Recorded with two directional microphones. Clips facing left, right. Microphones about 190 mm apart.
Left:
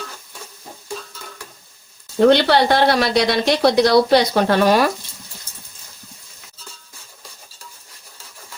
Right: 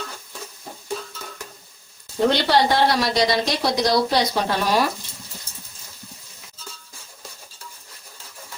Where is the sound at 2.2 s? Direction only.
60° left (ahead or behind).